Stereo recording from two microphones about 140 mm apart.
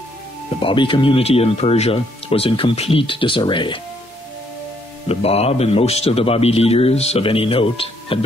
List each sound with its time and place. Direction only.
0.6 s speech: 35° left (ahead or behind)
5.0 s a man's voice: 45° left (ahead or behind)